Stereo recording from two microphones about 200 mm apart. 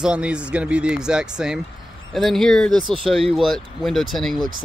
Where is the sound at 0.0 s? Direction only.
5° right (ahead or behind).